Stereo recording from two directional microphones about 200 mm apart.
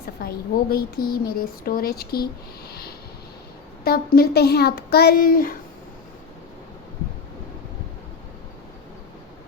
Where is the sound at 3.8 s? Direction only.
50° left (ahead or behind).